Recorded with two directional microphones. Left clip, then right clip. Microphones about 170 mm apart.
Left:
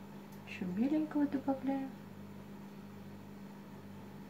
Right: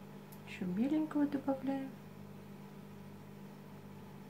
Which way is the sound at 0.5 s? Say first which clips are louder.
Left 1 dB; 20° right (ahead or behind).